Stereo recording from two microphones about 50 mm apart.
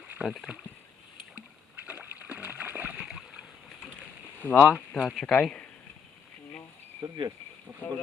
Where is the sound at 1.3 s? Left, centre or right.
Right.